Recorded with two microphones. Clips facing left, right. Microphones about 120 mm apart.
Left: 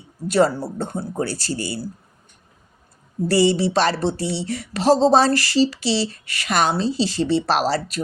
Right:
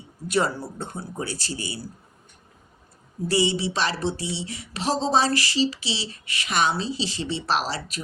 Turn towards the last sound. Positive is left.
turn(degrees=40)  # may be behind; listen again after turning